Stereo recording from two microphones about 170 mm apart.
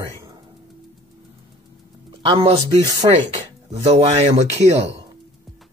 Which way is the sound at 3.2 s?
40° right (ahead or behind).